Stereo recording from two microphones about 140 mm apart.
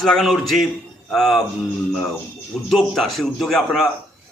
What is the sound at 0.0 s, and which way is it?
A man's voice, centre (ahead or behind).